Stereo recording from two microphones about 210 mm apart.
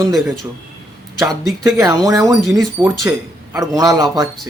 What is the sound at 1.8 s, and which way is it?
Speech, 15° right (ahead or behind).